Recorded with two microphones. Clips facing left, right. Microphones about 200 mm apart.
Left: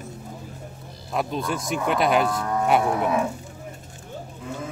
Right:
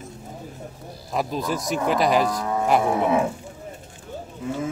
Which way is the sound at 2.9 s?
25° right (ahead or behind).